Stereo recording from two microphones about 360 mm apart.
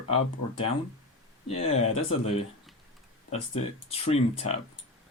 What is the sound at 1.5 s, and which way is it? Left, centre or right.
Speech, centre.